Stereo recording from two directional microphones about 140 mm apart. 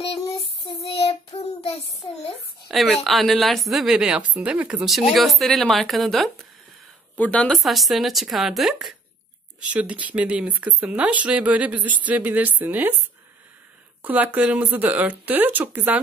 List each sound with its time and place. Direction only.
0.7 s child singing: 45° left (ahead or behind)
2.7 s a woman's voice: centre (ahead or behind)
14.0 s speech: 10° right (ahead or behind)